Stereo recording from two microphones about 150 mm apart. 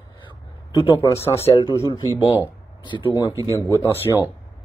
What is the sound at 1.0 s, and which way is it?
Speech, 15° left (ahead or behind).